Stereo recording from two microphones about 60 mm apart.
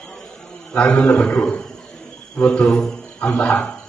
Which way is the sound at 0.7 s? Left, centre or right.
Centre.